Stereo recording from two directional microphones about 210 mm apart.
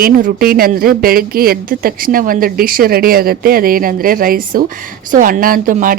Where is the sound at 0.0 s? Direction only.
45° right (ahead or behind).